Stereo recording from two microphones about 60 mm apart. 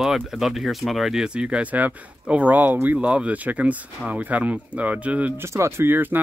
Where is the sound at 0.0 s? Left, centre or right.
Centre; by 5.3 s right.